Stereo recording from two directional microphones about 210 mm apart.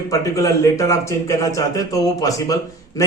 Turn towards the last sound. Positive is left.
turn(degrees=15)  # may be behind; listen again after turning